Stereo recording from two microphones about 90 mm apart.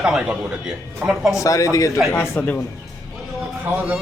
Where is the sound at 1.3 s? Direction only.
35° left (ahead or behind).